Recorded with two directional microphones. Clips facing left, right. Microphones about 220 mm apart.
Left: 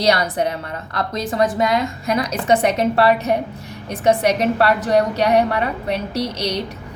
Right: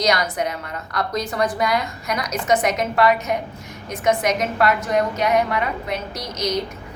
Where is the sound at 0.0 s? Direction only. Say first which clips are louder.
Left 3 dB; 30° left (ahead or behind).